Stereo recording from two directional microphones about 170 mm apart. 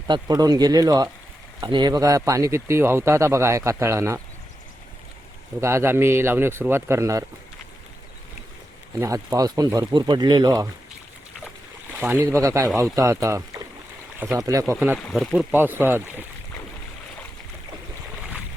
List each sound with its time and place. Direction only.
0.1 s a man's voice: 25° right (ahead or behind)
5.5 s a man's voice: 15° right (ahead or behind)
9.0 s speech: 20° right (ahead or behind)
11.9 s a man's voice: 10° right (ahead or behind)
14.9 s speech: centre (ahead or behind)
15.5 s a man's voice: 10° right (ahead or behind)